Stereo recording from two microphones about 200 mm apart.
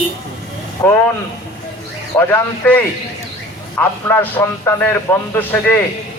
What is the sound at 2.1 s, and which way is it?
A man's voice, 10° left (ahead or behind).